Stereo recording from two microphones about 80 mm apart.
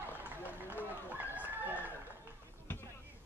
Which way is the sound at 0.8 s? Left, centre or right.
Right.